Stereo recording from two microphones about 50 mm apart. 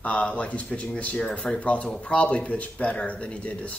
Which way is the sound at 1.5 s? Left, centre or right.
Left.